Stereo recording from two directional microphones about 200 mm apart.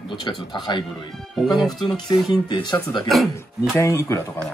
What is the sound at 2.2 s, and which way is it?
Speech, 20° left (ahead or behind).